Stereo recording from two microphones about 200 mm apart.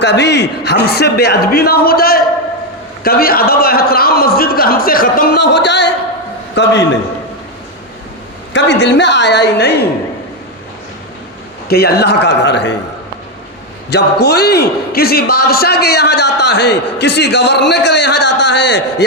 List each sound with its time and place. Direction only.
0.0 s a man's voice: 55° left (ahead or behind)
8.5 s a man's voice: 60° left (ahead or behind)
11.7 s a man's voice: 50° left (ahead or behind)
13.9 s a man's voice: 55° left (ahead or behind)